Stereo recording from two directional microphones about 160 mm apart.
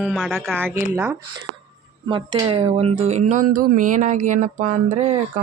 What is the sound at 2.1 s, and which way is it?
Speech, 35° right (ahead or behind).